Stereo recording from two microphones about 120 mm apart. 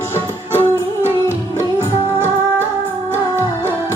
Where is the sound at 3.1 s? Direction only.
20° right (ahead or behind).